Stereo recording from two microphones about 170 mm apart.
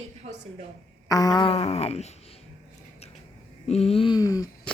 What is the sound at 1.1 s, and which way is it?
Speech, 20° left (ahead or behind).